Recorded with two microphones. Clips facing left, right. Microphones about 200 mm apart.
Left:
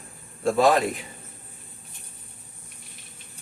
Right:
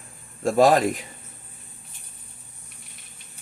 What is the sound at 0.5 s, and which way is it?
Speech, 40° right (ahead or behind).